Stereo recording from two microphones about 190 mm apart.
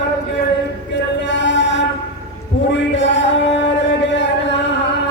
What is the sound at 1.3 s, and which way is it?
Mantra, 70° left (ahead or behind).